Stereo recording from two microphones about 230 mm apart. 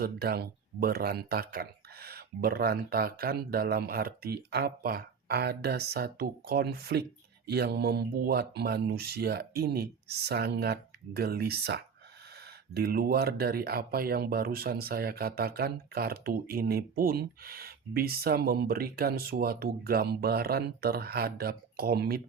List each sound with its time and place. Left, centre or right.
0.0 s speech: right